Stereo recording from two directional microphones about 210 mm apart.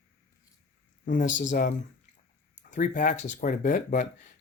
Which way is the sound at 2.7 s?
40° left (ahead or behind).